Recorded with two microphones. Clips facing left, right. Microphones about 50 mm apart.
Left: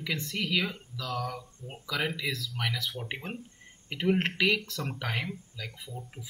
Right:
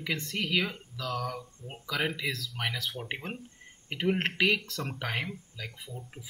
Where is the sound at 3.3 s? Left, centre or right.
Right.